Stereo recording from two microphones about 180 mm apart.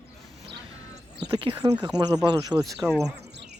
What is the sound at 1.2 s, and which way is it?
Speech, 25° right (ahead or behind).